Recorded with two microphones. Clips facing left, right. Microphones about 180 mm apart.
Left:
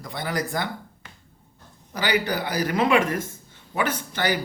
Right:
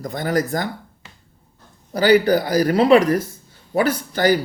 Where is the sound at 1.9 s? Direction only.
40° right (ahead or behind).